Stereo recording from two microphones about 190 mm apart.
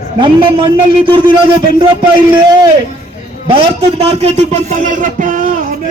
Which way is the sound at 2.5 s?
20° right (ahead or behind).